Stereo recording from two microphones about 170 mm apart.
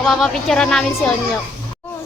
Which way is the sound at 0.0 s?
Centre (ahead or behind).